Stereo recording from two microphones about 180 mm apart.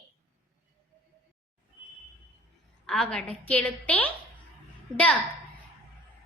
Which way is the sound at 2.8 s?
5° left (ahead or behind).